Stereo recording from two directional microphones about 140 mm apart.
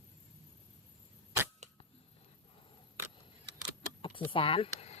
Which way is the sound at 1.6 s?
55° right (ahead or behind).